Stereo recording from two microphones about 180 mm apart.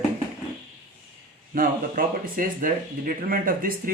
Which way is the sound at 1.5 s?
50° right (ahead or behind).